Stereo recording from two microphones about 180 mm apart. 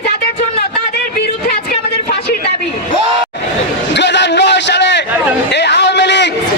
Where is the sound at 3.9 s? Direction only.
75° left (ahead or behind).